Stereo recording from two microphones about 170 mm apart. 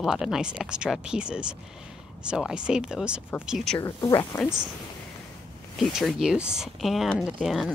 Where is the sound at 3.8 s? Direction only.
20° left (ahead or behind).